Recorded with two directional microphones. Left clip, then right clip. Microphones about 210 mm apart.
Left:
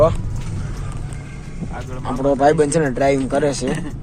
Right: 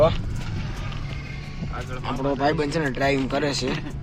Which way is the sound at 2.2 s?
15° left (ahead or behind).